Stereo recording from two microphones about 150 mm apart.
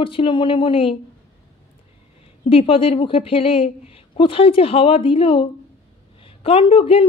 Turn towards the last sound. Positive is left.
turn(degrees=40)  # may be behind; listen again after turning